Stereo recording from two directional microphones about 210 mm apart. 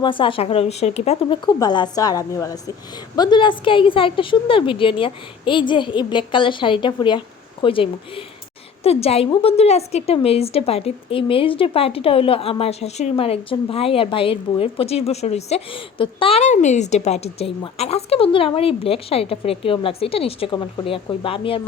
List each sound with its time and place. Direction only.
0.0 s a woman's voice: 25° left (ahead or behind)